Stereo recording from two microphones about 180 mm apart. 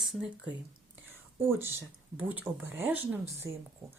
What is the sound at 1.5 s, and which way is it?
Speech, 10° right (ahead or behind).